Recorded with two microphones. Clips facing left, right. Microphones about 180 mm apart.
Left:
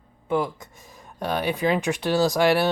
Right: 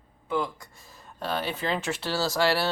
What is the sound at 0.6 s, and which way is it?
Speech, 15° left (ahead or behind).